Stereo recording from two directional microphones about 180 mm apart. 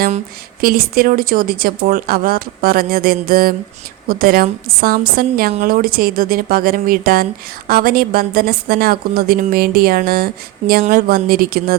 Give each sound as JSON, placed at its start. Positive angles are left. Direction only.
{"t": 0.6, "sound": "speech", "side_deg": -55}